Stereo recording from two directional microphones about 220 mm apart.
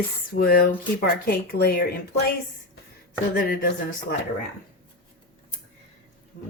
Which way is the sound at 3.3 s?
40° left (ahead or behind).